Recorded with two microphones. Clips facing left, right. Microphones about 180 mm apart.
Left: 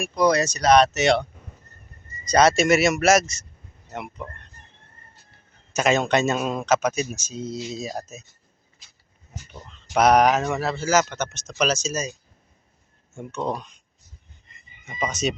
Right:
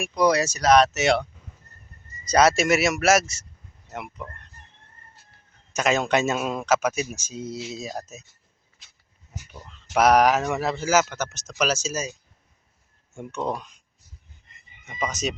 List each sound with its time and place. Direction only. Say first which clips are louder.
0.0 s speech: left 1 dB; 10° right (ahead or behind)
2.3 s speech: left 2 dB; 5° right (ahead or behind)
5.7 s speech: left 2 dB; centre (ahead or behind)
9.3 s speech: left 1 dB; 10° right (ahead or behind)
13.4 s speech: left 1 dB; 5° right (ahead or behind)
14.8 s speech: left 2 dB; centre (ahead or behind)